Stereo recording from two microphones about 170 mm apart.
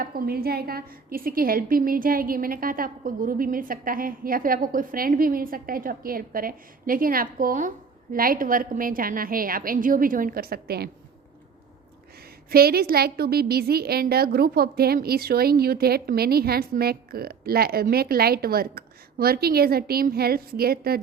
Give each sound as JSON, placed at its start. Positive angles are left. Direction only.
{"t": 0.0, "sound": "a woman's voice", "side_deg": -60}
{"t": 12.5, "sound": "a woman's voice", "side_deg": -65}